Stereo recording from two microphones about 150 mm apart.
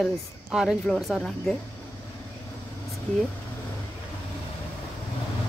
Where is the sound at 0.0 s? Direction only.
5° right (ahead or behind).